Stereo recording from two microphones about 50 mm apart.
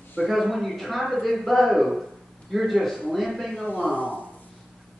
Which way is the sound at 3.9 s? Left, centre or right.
Right.